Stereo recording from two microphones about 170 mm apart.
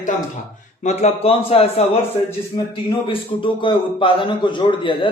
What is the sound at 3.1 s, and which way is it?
A man's voice, 30° left (ahead or behind).